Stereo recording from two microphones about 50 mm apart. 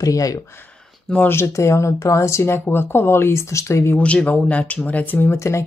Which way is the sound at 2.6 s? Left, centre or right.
Left.